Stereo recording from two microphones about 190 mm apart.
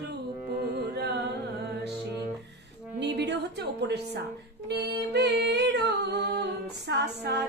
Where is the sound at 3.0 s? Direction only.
65° right (ahead or behind).